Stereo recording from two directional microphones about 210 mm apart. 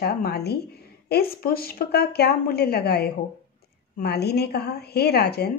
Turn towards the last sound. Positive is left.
turn(degrees=50)  # may be behind; listen again after turning